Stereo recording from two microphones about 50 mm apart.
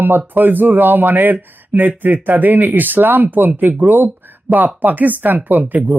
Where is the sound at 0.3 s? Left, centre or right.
Right.